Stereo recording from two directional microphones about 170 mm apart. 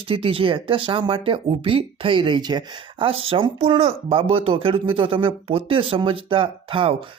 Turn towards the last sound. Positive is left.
turn(degrees=-30)  # may be behind; listen again after turning